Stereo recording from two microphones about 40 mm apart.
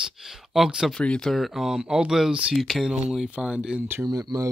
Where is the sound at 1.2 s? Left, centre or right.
Centre.